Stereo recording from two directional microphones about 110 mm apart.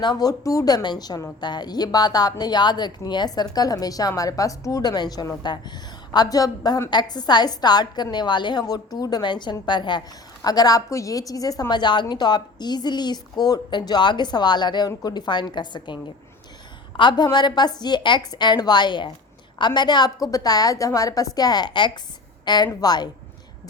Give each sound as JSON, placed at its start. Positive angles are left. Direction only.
{"t": 0.0, "sound": "a woman's voice", "side_deg": 40}
{"t": 17.0, "sound": "a woman's voice", "side_deg": 45}